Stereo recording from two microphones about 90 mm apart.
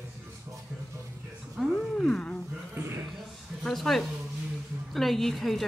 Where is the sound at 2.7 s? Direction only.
30° right (ahead or behind).